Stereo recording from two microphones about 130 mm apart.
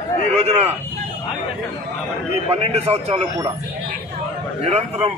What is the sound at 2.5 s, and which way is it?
Speech, 50° right (ahead or behind).